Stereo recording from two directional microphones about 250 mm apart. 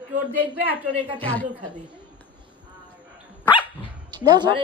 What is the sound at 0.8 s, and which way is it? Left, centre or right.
A woman's voice, centre.